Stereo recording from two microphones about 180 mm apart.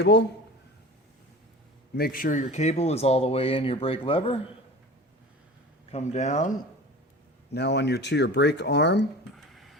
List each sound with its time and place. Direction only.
0.0 s speech: 75° left (ahead or behind)
2.0 s speech: 55° left (ahead or behind); by 4.4 s 30° left (ahead or behind)
5.9 s speech: 40° left (ahead or behind)
7.5 s speech: 70° left (ahead or behind)
9.5 s a sound: centre (ahead or behind)